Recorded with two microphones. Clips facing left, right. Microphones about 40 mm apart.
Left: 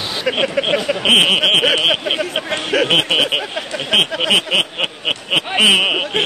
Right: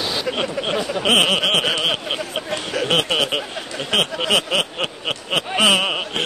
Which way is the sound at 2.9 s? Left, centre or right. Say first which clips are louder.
Left 4 dB; left.